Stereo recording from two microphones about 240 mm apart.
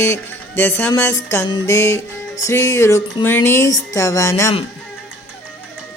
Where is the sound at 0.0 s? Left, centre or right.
Centre.